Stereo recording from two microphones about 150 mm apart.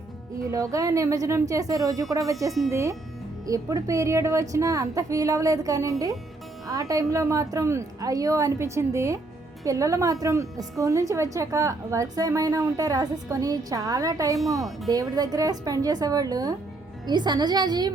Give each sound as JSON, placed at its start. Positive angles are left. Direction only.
{"t": 0.5, "sound": "a woman's voice", "side_deg": -20}